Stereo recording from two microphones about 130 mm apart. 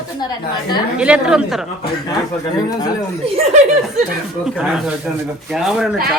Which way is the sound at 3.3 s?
65° right (ahead or behind).